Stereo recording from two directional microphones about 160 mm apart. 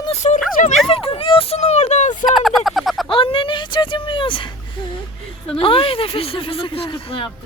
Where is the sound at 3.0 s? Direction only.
35° left (ahead or behind).